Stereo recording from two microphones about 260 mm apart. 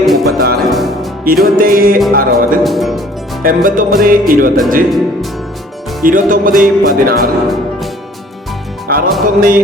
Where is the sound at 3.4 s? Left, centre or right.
Right.